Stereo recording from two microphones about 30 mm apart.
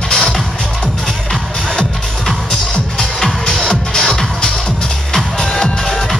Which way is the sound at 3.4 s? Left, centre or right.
Left.